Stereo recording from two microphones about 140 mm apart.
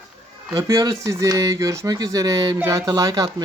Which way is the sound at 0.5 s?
25° right (ahead or behind).